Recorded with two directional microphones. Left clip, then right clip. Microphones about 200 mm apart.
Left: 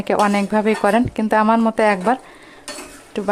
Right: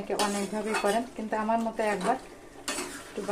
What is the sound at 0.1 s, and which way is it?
Speech, 60° left (ahead or behind).